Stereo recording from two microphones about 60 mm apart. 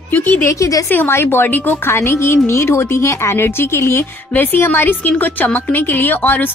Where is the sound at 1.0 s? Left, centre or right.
Left.